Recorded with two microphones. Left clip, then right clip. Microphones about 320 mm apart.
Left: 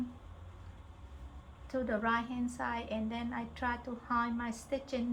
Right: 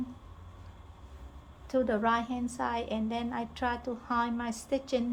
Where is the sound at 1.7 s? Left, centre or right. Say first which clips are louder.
Right 5 dB; right.